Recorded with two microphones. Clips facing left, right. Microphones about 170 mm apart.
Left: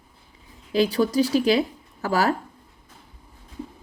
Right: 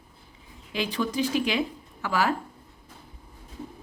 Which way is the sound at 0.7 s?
40° left (ahead or behind).